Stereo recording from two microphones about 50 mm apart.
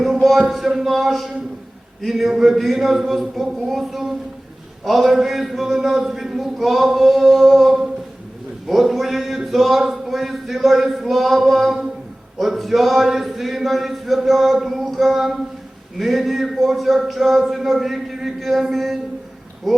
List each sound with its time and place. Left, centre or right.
0.0 s speech: centre